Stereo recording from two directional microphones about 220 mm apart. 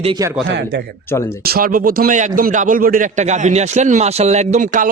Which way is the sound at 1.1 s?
10° left (ahead or behind).